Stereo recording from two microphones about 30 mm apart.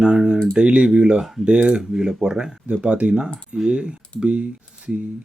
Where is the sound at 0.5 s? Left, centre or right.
Right.